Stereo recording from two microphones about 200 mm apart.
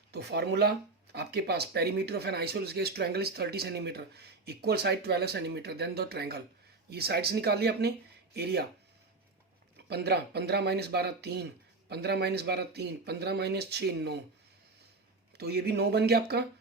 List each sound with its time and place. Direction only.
0.1 s speech: 55° right (ahead or behind)
9.9 s speech: 55° right (ahead or behind)
15.4 s speech: 55° right (ahead or behind)